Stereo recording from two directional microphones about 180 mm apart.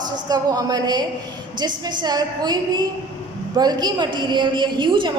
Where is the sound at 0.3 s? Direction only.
20° right (ahead or behind).